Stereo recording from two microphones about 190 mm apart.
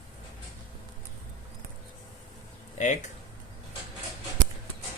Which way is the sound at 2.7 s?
40° left (ahead or behind).